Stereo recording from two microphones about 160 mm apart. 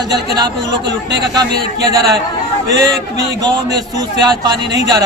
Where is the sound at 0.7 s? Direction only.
90° right.